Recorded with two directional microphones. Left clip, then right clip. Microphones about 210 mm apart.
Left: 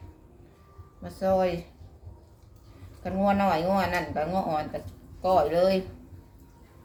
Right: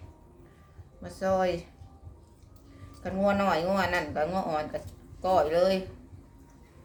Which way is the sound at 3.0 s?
10° right (ahead or behind).